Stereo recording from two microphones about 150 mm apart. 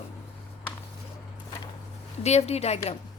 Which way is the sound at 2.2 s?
45° left (ahead or behind).